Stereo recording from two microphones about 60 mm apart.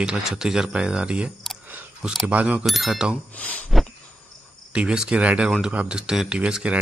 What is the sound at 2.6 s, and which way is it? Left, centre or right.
Speech, centre.